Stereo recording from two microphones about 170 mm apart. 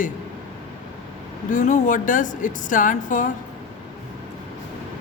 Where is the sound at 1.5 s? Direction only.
45° left (ahead or behind).